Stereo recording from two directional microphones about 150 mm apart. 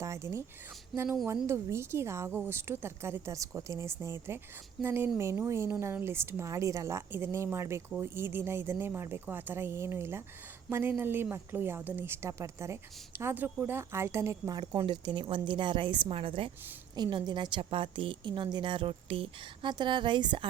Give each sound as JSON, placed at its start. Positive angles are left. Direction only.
{"t": 0.0, "sound": "speech", "side_deg": -20}
{"t": 0.9, "sound": "speech", "side_deg": 0}
{"t": 1.5, "sound": "a woman's voice", "side_deg": -15}